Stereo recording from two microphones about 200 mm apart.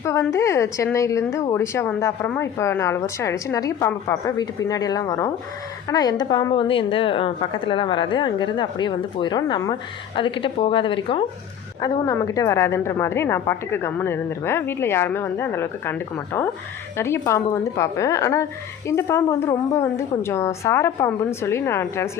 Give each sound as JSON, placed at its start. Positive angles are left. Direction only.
{"t": 0.0, "sound": "a woman's voice", "side_deg": 15}